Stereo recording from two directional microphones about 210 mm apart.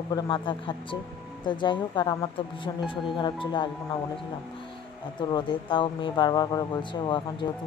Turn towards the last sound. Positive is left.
turn(degrees=20)  # may be behind; listen again after turning